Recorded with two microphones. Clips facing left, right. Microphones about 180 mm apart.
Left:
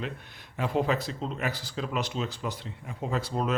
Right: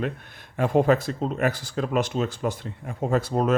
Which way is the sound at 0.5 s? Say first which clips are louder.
Right 7 dB; 50° right (ahead or behind).